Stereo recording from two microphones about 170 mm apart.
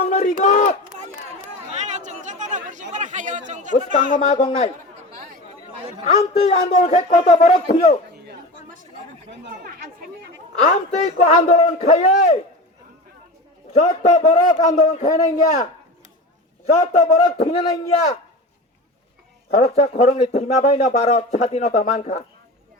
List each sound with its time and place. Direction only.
0.0 s a sound: 45° left (ahead or behind)
1.4 s chatter: 45° right (ahead or behind)
2.9 s speech: 45° right (ahead or behind)
3.9 s speech: 40° left (ahead or behind)
6.1 s speech: 40° left (ahead or behind)
10.6 s speech: 40° left (ahead or behind)
13.7 s a man's voice: 40° left (ahead or behind)
16.6 s a man's voice: 40° left (ahead or behind)
17.4 s speech: 30° left (ahead or behind)
19.5 s speech: 40° left (ahead or behind)